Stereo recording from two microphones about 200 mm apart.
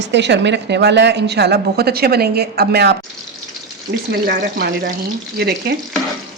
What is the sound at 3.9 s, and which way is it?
Speech, 35° right (ahead or behind).